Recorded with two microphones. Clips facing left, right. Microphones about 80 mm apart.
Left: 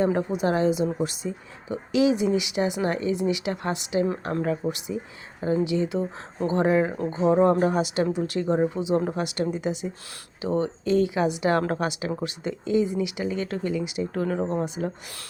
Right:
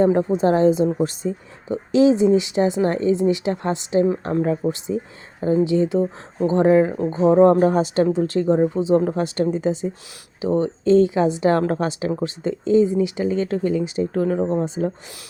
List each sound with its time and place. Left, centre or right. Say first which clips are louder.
0.0 s speech: right 6 dB; right